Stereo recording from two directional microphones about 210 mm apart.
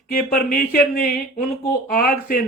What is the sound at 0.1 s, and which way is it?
Speech, 45° left (ahead or behind).